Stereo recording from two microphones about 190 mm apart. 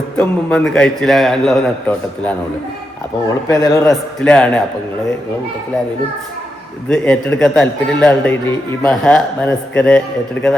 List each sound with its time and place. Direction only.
0.2 s a man's voice: 5° left (ahead or behind)
3.2 s a man's voice: 15° left (ahead or behind)
4.2 s a man's voice: 5° left (ahead or behind)
6.9 s a man's voice: 5° left (ahead or behind)